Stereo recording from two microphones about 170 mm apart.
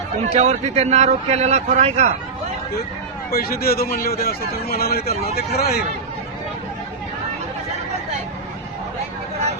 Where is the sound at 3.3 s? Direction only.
60° left (ahead or behind).